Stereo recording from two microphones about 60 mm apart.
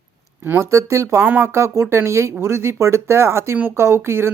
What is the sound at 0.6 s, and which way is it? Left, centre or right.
Speech, right.